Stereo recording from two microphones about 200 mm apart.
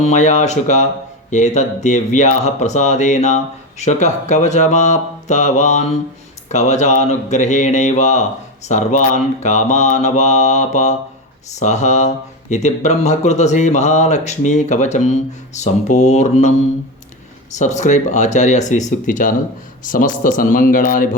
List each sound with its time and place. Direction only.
0.0 s speech: 35° left (ahead or behind)